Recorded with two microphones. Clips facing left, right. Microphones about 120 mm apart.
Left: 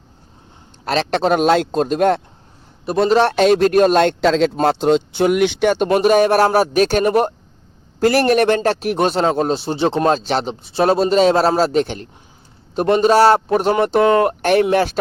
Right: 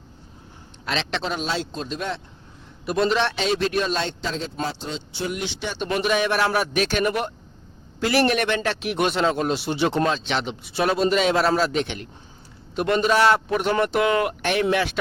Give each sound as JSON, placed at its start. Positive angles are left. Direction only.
{"t": 0.9, "sound": "speech", "side_deg": 45}
{"t": 1.4, "sound": "speech", "side_deg": 60}
{"t": 2.8, "sound": "speech", "side_deg": 35}
{"t": 4.6, "sound": "a man's voice", "side_deg": 65}
{"t": 10.1, "sound": "a man's voice", "side_deg": 40}